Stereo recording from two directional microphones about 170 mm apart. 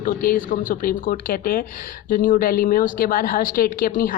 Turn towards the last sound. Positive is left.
turn(degrees=55)  # may be behind; listen again after turning